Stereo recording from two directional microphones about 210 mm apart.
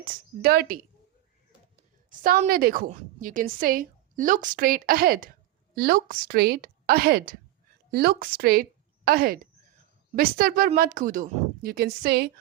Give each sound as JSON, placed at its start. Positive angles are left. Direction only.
{"t": 0.0, "sound": "speech", "side_deg": -45}
{"t": 2.0, "sound": "a woman's voice", "side_deg": -40}